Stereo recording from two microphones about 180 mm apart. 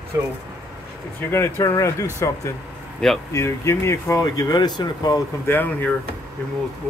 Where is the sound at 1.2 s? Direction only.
15° left (ahead or behind).